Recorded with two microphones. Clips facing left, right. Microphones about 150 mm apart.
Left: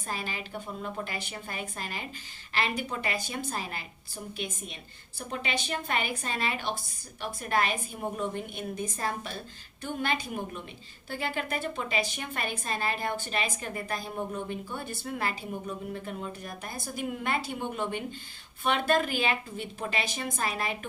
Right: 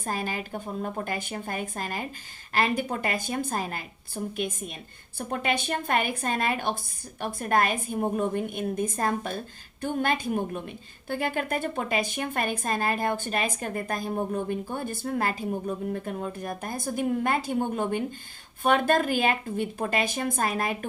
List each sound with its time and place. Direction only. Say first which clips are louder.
0.0 s a woman's voice: right 5 dB; 45° right (ahead or behind)